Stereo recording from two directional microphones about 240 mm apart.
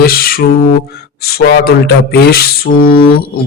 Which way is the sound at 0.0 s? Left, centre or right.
Left.